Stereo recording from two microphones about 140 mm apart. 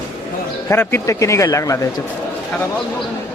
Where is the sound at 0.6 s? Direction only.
15° left (ahead or behind).